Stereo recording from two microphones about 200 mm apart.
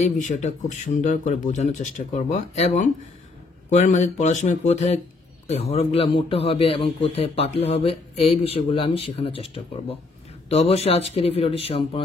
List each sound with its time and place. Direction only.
0.2 s a man's voice: 40° left (ahead or behind)